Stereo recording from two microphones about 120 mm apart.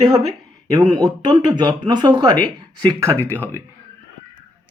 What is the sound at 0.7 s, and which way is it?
Speech, 35° right (ahead or behind).